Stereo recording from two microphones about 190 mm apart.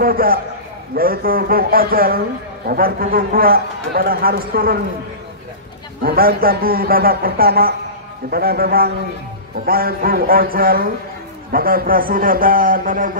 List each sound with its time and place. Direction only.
0.0 s a man's voice: 50° right (ahead or behind)
6.0 s a man's voice: 50° right (ahead or behind)